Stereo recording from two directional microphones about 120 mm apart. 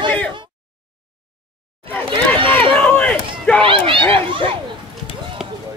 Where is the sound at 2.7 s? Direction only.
10° left (ahead or behind).